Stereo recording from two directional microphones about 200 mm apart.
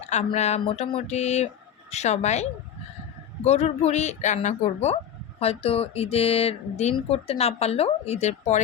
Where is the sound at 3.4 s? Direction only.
35° left (ahead or behind).